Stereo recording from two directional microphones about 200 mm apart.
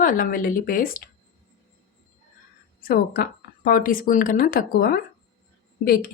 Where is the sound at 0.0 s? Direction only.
45° left (ahead or behind).